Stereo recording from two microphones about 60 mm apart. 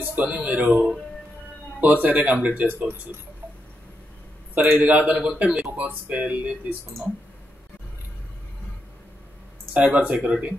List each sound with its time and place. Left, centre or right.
0.0 s speech: right
4.6 s speech: right
9.8 s speech: right